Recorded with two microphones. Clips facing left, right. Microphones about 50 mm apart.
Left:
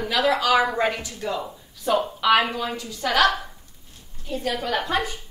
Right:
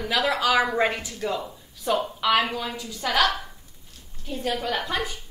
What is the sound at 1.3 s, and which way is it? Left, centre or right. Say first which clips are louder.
A woman's voice: left 1 dB; centre.